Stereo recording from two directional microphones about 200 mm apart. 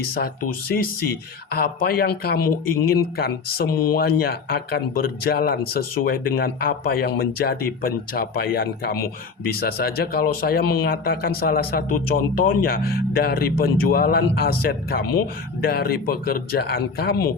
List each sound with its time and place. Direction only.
0.1 s speech: 50° left (ahead or behind)